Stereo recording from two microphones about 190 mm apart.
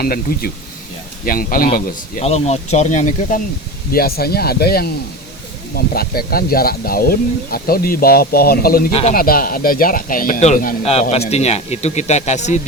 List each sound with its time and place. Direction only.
0.0 s speech: 50° left (ahead or behind)
2.2 s speech: 35° left (ahead or behind)
3.9 s speech: 55° left (ahead or behind)
8.9 s speech: 30° left (ahead or behind)
9.1 s speech: 50° left (ahead or behind)